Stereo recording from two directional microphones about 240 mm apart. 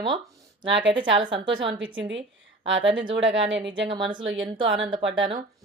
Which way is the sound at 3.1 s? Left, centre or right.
Right.